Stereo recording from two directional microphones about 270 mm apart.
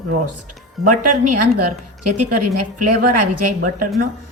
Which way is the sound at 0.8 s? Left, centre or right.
Right.